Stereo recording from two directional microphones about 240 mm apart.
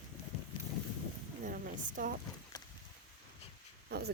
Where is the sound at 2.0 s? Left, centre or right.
Right.